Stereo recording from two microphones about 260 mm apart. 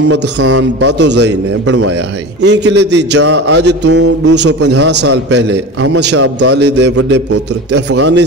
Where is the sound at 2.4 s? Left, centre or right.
Right.